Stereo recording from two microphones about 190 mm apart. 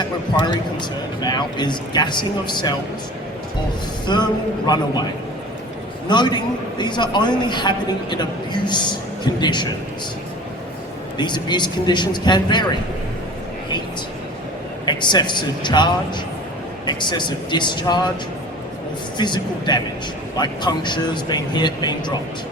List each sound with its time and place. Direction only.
0.8 s a man's voice: 25° left (ahead or behind)
4.0 s a man's voice: 25° left (ahead or behind)
6.1 s a man's voice: 25° left (ahead or behind)
11.2 s a man's voice: 25° left (ahead or behind)
14.8 s a man's voice: 25° left (ahead or behind)
19.1 s a man's voice: 25° left (ahead or behind)